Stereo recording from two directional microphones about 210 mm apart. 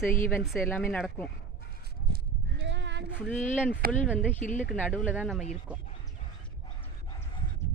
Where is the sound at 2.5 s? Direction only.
55° right (ahead or behind).